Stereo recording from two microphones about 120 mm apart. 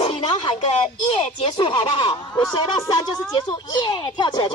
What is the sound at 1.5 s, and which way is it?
Speech, 40° left (ahead or behind).